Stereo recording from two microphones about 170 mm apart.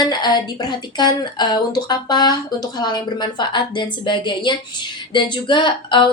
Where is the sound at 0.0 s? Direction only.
25° left (ahead or behind).